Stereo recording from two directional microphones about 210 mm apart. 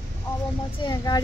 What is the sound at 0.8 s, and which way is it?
Speech, 20° left (ahead or behind).